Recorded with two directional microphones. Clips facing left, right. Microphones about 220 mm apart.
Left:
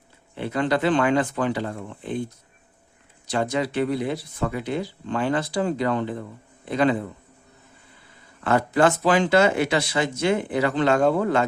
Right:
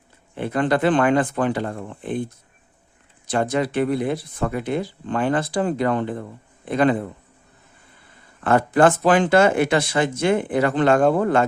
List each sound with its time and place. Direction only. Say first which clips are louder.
0.3 s speech: right 3 dB; 50° right (ahead or behind)
3.2 s speech: right 3 dB; 55° right (ahead or behind)
8.4 s speech: right 3 dB; 50° right (ahead or behind)